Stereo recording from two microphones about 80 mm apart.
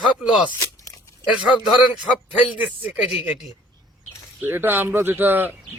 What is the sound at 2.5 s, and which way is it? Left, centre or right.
Speech, right.